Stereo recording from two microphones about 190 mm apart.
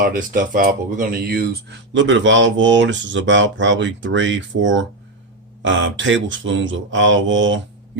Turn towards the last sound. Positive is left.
turn(degrees=-80)